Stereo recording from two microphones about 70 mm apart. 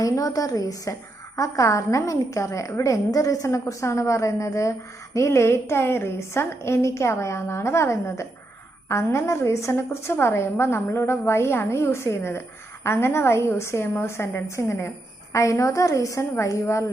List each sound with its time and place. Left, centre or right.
0.0 s a woman's voice: left